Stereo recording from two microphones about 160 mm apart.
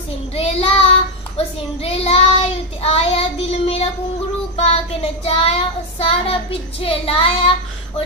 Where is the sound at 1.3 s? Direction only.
40° left (ahead or behind).